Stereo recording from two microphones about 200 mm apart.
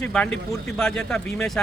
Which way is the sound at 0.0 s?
5° left (ahead or behind).